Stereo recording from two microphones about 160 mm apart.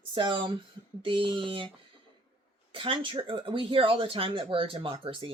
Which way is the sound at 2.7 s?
35° right (ahead or behind).